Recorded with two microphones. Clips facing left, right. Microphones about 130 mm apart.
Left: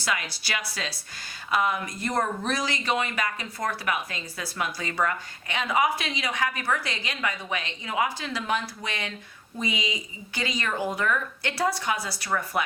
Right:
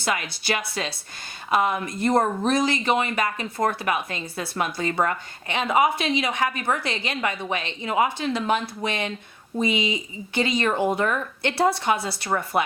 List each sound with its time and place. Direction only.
0.6 s speech: 25° right (ahead or behind)